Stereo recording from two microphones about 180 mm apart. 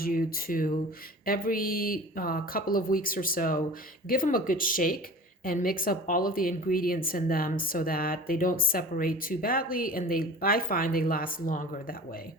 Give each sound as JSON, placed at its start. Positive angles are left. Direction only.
{"t": 0.0, "sound": "speech", "side_deg": 55}